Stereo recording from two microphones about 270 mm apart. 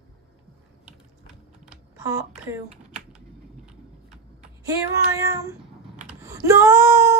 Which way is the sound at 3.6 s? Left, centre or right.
Centre.